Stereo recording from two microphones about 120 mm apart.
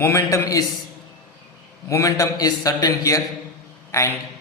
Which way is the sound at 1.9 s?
25° left (ahead or behind).